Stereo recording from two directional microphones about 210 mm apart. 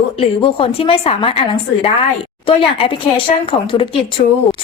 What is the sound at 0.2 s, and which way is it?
A woman's voice, 25° left (ahead or behind).